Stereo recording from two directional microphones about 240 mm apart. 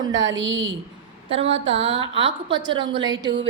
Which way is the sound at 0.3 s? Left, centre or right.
Right.